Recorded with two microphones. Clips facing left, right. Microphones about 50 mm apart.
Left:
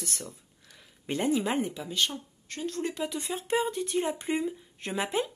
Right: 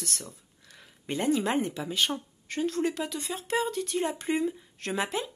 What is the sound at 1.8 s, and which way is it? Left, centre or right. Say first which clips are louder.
Speech: right 2 dB; centre.